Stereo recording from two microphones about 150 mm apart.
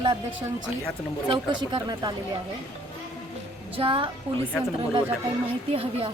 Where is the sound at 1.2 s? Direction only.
30° right (ahead or behind).